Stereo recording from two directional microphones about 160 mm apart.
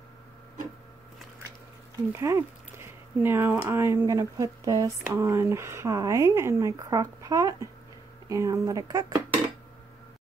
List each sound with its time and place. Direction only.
2.1 s speech: 20° right (ahead or behind)